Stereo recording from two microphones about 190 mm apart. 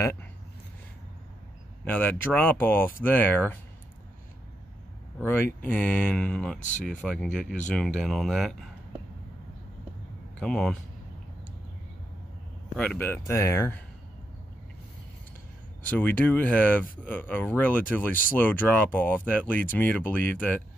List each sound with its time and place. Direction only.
1.9 s speech: 10° left (ahead or behind)
5.2 s speech: 10° left (ahead or behind)
10.4 s speech: 5° left (ahead or behind)
12.7 s speech: 10° left (ahead or behind)
15.9 s speech: 10° left (ahead or behind)